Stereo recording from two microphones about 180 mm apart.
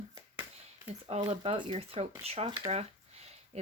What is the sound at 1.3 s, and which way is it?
Speech, 25° right (ahead or behind).